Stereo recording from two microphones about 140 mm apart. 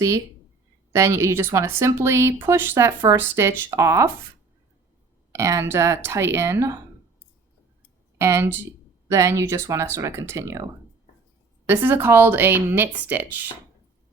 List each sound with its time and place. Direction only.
0.9 s a woman's voice: 20° right (ahead or behind)
5.3 s a woman's voice: 20° right (ahead or behind)
8.2 s a woman's voice: 20° right (ahead or behind)
11.7 s speech: 15° right (ahead or behind)